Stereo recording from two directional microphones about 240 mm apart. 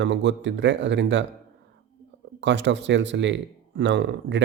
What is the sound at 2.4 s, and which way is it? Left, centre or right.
Speech, right.